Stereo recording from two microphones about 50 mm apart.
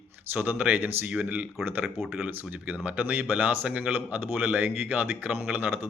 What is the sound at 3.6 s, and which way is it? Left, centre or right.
Speech, right.